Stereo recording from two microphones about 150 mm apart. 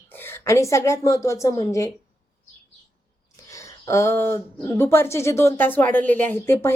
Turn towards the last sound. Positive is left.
turn(degrees=15)  # may be behind; listen again after turning